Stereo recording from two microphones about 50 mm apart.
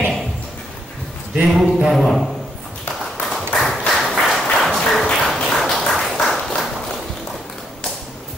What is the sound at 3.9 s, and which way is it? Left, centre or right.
Applause, centre.